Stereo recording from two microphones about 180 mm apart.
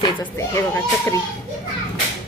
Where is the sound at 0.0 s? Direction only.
20° left (ahead or behind).